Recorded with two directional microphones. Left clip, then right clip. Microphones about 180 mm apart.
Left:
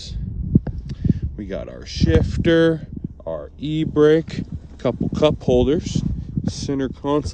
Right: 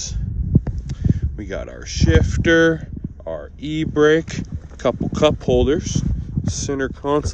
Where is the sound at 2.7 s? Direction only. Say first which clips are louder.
Even; 35° left (ahead or behind).